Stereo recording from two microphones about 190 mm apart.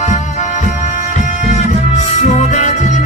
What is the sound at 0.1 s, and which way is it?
Music, 40° left (ahead or behind).